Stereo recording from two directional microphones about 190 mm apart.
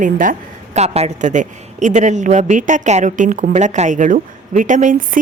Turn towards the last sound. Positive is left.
turn(degrees=-40)  # may be behind; listen again after turning